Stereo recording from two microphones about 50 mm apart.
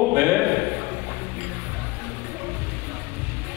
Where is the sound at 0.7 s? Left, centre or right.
Right.